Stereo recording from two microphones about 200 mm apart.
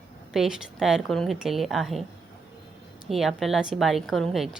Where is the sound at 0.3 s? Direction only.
Centre (ahead or behind).